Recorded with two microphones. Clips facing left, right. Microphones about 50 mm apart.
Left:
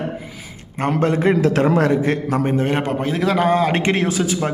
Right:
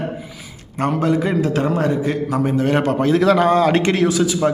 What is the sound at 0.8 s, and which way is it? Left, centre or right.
Speech, left.